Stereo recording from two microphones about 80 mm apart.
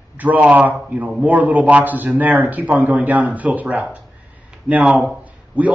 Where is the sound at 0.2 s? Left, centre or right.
Centre.